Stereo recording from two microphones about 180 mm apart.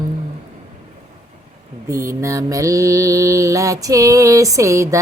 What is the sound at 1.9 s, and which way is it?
Female singing, 15° right (ahead or behind).